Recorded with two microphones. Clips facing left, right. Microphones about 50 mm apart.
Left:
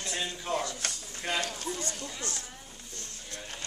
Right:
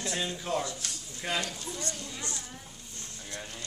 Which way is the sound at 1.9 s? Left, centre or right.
Centre.